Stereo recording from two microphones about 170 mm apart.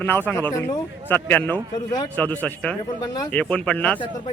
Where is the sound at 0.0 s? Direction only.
10° left (ahead or behind).